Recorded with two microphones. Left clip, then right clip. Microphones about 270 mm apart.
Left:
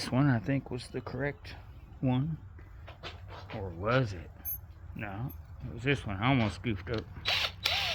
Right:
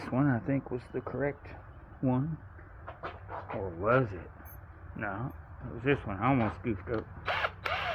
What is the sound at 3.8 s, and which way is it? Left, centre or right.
Speech, left.